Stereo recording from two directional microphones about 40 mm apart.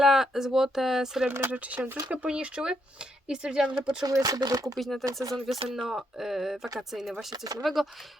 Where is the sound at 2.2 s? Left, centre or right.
Right.